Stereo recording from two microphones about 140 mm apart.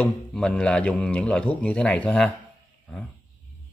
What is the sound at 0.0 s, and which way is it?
Speech, 10° left (ahead or behind).